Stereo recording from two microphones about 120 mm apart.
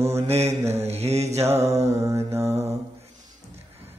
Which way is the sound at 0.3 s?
65° right (ahead or behind).